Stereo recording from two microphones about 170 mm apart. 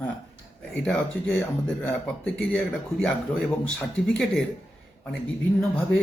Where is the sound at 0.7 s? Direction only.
5° left (ahead or behind).